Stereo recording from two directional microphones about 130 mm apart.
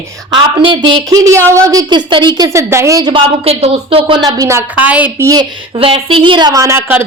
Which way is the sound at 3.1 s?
50° right (ahead or behind).